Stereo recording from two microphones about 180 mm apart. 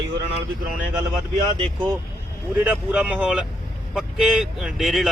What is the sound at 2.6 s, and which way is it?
Speech, 10° right (ahead or behind).